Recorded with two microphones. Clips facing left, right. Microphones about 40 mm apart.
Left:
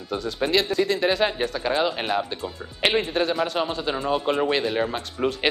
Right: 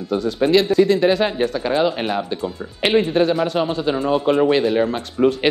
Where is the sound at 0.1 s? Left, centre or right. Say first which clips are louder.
Right 7 dB; centre.